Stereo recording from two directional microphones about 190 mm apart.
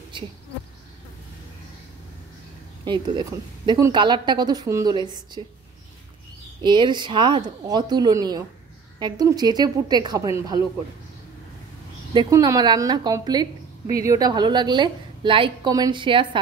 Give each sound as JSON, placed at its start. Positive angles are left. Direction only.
{"t": 2.8, "sound": "a woman's voice", "side_deg": -20}
{"t": 6.6, "sound": "a woman's voice", "side_deg": -25}
{"t": 12.1, "sound": "a woman's voice", "side_deg": -20}